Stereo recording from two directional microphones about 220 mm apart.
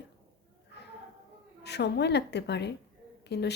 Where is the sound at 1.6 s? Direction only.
50° left (ahead or behind).